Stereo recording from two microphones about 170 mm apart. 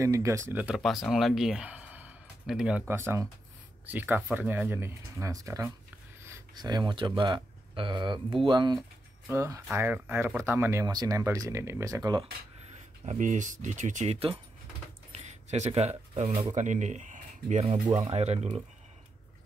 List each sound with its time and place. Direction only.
0.0 s speech: 20° right (ahead or behind)
13.0 s speech: 45° right (ahead or behind)
15.1 s a sound: 40° right (ahead or behind)
16.3 s speech: 40° right (ahead or behind)